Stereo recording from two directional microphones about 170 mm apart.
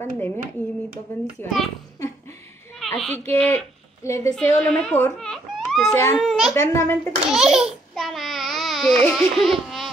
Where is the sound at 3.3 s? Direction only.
10° left (ahead or behind).